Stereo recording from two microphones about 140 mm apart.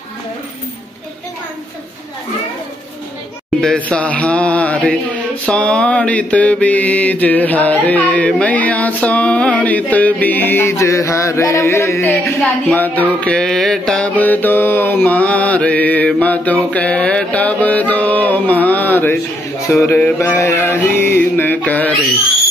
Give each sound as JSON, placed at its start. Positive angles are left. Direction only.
{"t": 3.6, "sound": "mantra", "side_deg": 5}
{"t": 12.3, "sound": "speech", "side_deg": 0}
{"t": 12.7, "sound": "mantra", "side_deg": 15}
{"t": 20.3, "sound": "a sound", "side_deg": 20}